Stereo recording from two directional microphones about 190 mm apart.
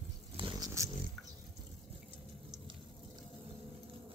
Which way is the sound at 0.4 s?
20° right (ahead or behind).